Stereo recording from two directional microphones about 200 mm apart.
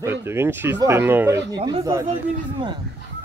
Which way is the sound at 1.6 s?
25° right (ahead or behind).